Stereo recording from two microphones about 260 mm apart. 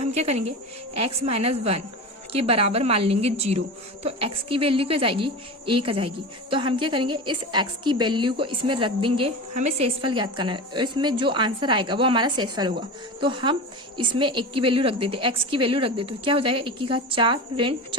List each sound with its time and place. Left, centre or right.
0.0 s a woman's voice: right